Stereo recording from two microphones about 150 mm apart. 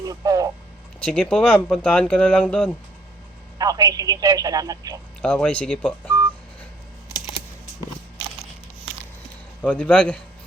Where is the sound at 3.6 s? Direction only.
25° right (ahead or behind).